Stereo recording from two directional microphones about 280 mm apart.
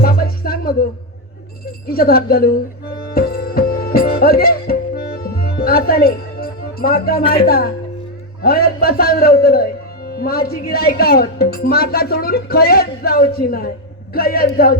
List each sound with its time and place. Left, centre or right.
0.0 s music: left
1.9 s music: left
7.2 s speech: centre
7.4 s speech: left